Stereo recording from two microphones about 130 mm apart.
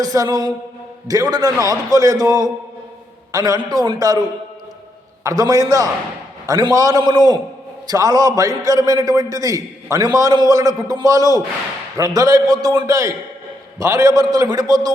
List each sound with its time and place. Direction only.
0.0 s a man's voice: 30° right (ahead or behind)
5.2 s a man's voice: 30° right (ahead or behind)